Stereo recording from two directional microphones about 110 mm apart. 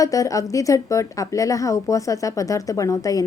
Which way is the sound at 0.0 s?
30° left (ahead or behind).